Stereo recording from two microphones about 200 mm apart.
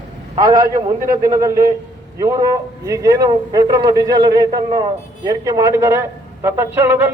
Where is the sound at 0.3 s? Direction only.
20° right (ahead or behind).